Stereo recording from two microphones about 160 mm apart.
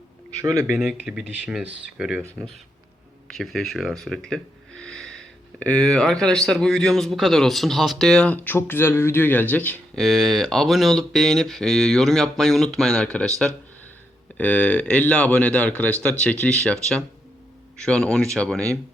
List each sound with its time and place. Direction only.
0.4 s speech: 20° right (ahead or behind)
3.2 s speech: centre (ahead or behind)
10.0 s speech: centre (ahead or behind)
14.3 s speech: 10° left (ahead or behind)